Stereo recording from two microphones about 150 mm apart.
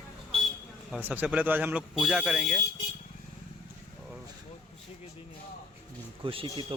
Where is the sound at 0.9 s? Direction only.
10° right (ahead or behind).